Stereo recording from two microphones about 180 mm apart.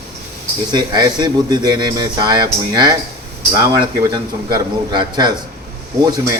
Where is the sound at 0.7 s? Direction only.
25° right (ahead or behind).